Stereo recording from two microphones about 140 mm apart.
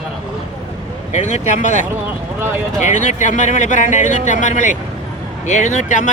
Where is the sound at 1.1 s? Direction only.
55° left (ahead or behind).